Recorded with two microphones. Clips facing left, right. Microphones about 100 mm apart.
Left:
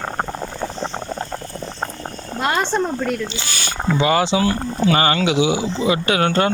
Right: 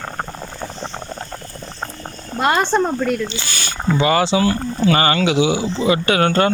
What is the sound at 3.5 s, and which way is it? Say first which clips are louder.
Speech: left 1 dB; 10° left (ahead or behind).